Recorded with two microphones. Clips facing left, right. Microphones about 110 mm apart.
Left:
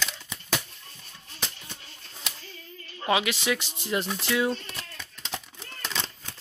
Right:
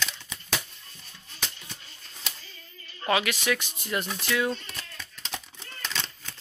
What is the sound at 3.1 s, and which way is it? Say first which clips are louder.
Speech: even; 20° left (ahead or behind).